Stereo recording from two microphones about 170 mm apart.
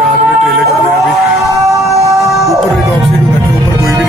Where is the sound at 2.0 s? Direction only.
20° right (ahead or behind).